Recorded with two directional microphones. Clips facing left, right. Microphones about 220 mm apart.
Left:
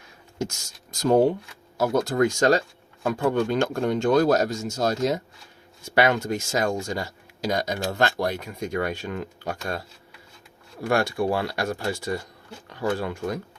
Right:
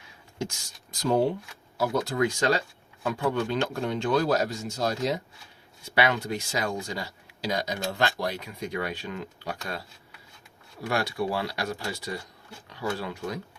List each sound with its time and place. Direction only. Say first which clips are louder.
0.3 s speech: left 3 dB; 45° left (ahead or behind)
10.8 s speech: left 5 dB; 50° left (ahead or behind)